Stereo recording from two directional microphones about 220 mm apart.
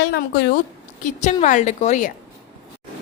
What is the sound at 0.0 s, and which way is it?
A woman's voice, 45° left (ahead or behind).